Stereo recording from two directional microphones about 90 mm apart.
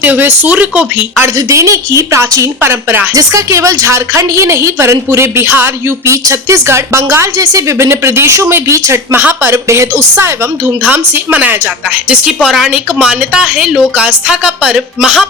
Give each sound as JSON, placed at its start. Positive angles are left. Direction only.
{"t": 0.0, "sound": "a woman's voice", "side_deg": -20}
{"t": 1.4, "sound": "a woman's voice", "side_deg": -35}
{"t": 6.1, "sound": "a woman's voice", "side_deg": -35}
{"t": 9.1, "sound": "a woman's voice", "side_deg": -20}